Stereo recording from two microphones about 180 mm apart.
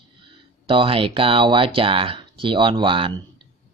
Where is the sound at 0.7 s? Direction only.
30° right (ahead or behind).